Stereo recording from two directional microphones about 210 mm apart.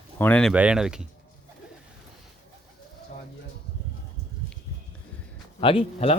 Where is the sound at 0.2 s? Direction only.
5° left (ahead or behind).